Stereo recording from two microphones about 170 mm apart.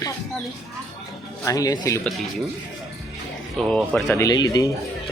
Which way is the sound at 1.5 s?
20° left (ahead or behind).